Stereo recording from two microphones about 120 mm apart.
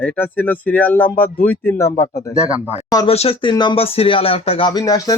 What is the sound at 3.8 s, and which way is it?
Speech, 50° left (ahead or behind).